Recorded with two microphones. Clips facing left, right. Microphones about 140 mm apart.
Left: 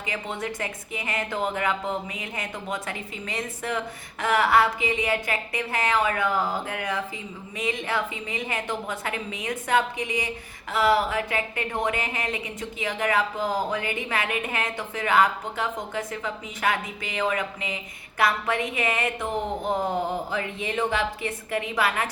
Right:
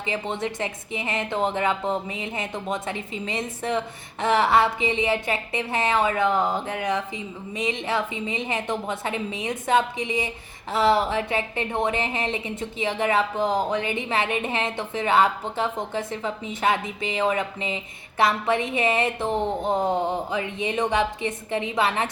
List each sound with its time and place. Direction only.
0.0 s a woman's voice: 25° right (ahead or behind)